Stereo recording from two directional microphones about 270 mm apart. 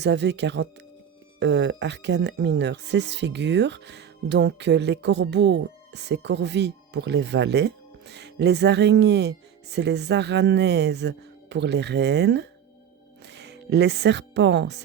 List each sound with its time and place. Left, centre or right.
0.0 s speech: right